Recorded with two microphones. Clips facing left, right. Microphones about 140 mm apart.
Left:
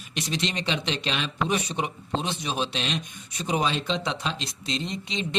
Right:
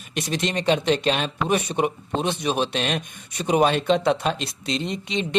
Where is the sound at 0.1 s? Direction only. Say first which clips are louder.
Right 4 dB; 50° right (ahead or behind).